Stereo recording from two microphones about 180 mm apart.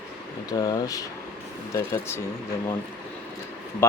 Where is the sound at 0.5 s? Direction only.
20° left (ahead or behind).